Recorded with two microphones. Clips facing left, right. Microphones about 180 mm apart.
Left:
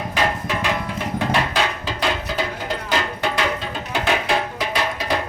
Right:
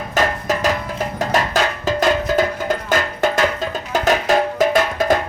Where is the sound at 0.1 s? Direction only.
45° right (ahead or behind).